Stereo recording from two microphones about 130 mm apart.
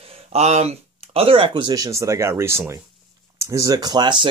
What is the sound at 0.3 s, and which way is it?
Speech, 55° right (ahead or behind).